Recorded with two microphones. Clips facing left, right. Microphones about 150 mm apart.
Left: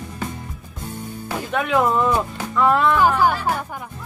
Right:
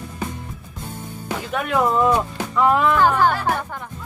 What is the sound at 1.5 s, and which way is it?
Speech, centre (ahead or behind).